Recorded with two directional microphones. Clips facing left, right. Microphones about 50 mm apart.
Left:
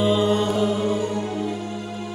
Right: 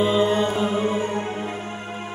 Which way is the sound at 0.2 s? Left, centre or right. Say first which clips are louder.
Even; right.